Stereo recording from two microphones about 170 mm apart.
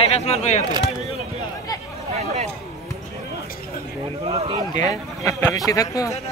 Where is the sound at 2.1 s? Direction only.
40° right (ahead or behind).